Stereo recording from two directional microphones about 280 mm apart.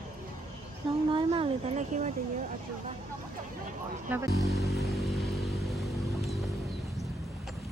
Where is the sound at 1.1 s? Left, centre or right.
Centre.